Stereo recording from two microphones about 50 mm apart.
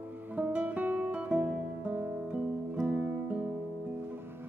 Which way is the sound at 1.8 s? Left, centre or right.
Right.